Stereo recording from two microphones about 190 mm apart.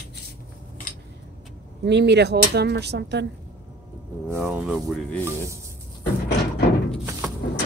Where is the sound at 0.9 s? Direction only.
45° left (ahead or behind).